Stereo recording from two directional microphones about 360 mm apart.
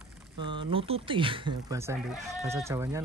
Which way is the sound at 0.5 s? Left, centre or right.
Centre.